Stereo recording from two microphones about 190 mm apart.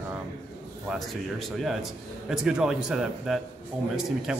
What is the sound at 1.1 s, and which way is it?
A man's voice, centre (ahead or behind).